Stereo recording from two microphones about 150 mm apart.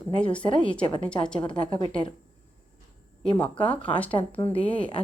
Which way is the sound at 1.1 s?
5° left (ahead or behind).